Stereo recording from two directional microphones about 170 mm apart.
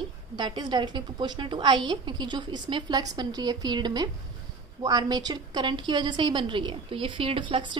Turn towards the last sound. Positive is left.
turn(degrees=-30)  # may be behind; listen again after turning